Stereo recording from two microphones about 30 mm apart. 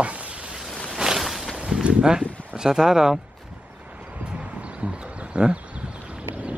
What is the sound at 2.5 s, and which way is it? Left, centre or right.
Speech, centre.